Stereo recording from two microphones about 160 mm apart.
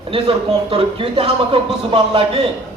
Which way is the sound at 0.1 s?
35° right (ahead or behind).